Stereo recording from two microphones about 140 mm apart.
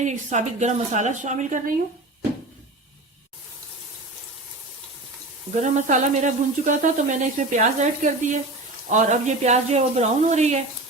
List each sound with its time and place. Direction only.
0.0 s speech: 60° right (ahead or behind)
5.5 s speech: 60° right (ahead or behind)